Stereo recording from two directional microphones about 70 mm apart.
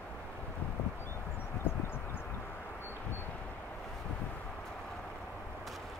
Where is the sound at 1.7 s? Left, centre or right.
Left.